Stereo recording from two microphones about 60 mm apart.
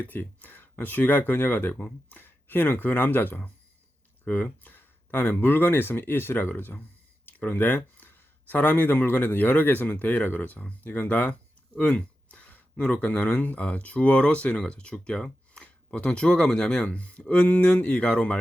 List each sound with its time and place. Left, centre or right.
0.0 s speech: left; by 16.8 s centre
16.8 s speech: left